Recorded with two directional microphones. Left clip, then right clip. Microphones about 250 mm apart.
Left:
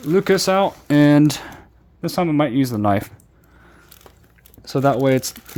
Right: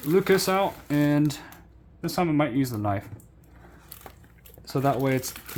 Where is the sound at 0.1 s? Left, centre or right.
Left.